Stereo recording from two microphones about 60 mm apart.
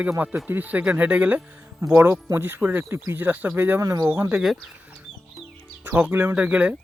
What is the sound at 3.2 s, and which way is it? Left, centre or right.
Speech, right.